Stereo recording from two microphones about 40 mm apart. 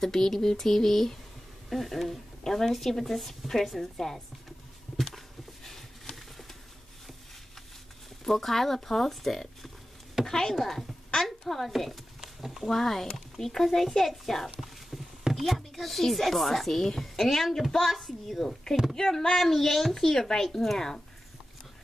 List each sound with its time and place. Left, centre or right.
0.0 s a child's voice: centre
4.9 s a sound: centre
8.2 s a child's voice: centre
10.5 s speech: centre
12.2 s a sound: centre
12.6 s a child's voice: centre
19.3 s a child's voice: centre